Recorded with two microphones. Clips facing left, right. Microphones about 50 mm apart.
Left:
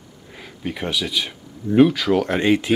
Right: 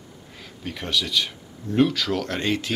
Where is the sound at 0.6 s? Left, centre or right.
Centre.